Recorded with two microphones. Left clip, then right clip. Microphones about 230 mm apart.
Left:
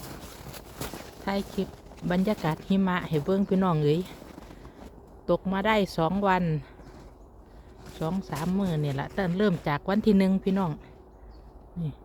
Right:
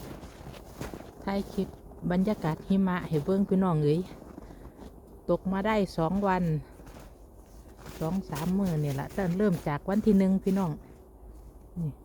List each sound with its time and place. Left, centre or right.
0.1 s a sound: left
1.2 s speech: centre
5.2 s speech: centre
8.2 s speech: centre